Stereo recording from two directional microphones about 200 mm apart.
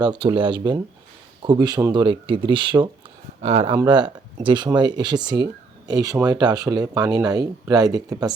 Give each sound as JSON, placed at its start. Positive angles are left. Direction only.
{"t": 0.0, "sound": "speech", "side_deg": -25}